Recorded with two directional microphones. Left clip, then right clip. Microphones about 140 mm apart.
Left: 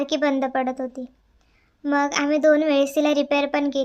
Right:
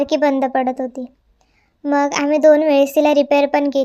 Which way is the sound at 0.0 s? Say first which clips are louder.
Right 6 dB; 25° right (ahead or behind).